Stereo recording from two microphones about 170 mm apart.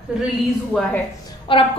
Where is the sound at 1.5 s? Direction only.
30° left (ahead or behind).